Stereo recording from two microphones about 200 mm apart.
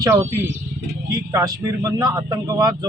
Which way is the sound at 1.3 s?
15° right (ahead or behind).